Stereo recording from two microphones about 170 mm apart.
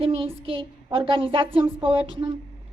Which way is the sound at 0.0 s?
35° right (ahead or behind).